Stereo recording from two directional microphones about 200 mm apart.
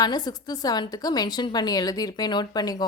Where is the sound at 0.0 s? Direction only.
20° left (ahead or behind).